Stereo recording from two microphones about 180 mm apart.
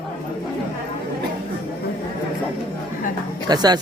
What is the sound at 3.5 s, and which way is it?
Speech, 20° right (ahead or behind).